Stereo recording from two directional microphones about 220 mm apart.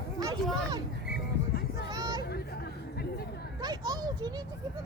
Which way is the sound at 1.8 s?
15° right (ahead or behind).